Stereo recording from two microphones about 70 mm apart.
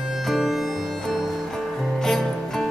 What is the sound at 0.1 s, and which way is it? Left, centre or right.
Music, centre.